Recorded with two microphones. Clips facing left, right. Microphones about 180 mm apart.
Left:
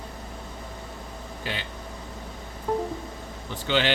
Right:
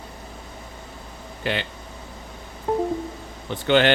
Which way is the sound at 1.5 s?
70° right (ahead or behind).